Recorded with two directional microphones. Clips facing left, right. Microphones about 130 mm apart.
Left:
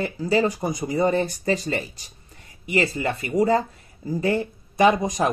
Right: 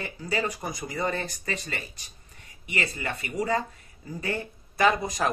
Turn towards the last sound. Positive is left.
turn(degrees=20)  # may be behind; listen again after turning